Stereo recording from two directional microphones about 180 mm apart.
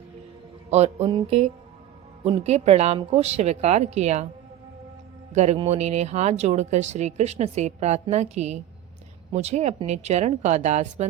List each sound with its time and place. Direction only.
0.7 s speech: 35° right (ahead or behind)
5.3 s speech: 40° right (ahead or behind)